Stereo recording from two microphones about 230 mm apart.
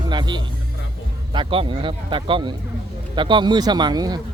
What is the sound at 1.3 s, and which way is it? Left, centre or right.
Speech, right.